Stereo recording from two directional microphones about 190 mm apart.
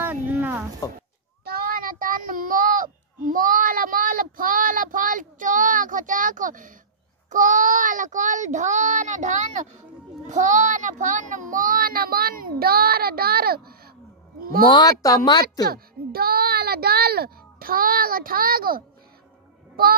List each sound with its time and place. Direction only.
0.0 s a sound: 10° right (ahead or behind)
1.4 s child singing: 50° right (ahead or behind)
7.2 s a child's voice: 40° right (ahead or behind)
14.6 s a child's voice: 25° left (ahead or behind)
15.6 s speech: 55° right (ahead or behind)